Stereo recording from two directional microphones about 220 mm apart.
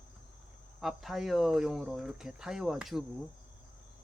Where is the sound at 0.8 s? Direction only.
Centre (ahead or behind).